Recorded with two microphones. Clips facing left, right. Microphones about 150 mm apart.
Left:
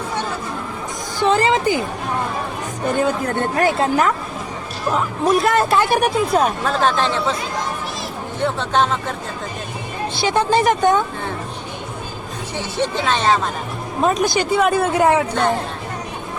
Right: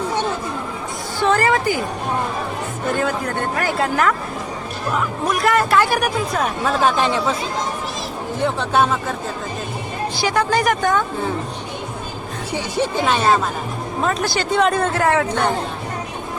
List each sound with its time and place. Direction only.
1.2 s speech: 20° left (ahead or behind)
2.9 s speech: 20° left (ahead or behind)
5.3 s speech: 25° left (ahead or behind)
6.7 s speech: 10° right (ahead or behind)
8.4 s speech: 10° right (ahead or behind)
10.2 s speech: 25° left (ahead or behind)
12.5 s speech: 10° right (ahead or behind)
14.0 s speech: 15° left (ahead or behind)